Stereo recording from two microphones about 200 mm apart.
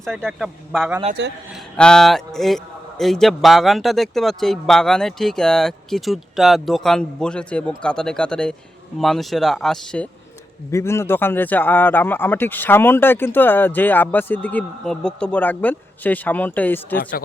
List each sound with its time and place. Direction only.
0.0 s speech: centre (ahead or behind)
17.0 s speech: 45° left (ahead or behind)